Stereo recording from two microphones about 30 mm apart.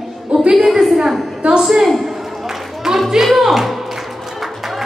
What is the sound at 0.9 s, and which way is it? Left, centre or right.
Speech, centre.